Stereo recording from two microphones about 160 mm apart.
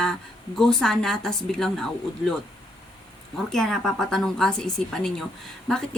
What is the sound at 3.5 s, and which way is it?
A woman's voice, centre (ahead or behind).